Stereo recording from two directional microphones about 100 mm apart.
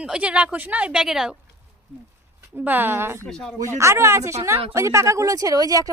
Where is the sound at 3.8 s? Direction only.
30° right (ahead or behind).